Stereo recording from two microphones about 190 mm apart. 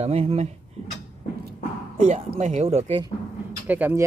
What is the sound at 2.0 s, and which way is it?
Speech, 35° right (ahead or behind).